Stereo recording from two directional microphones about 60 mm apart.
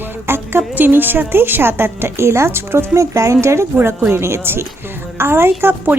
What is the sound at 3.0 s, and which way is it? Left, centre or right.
A woman's voice, right.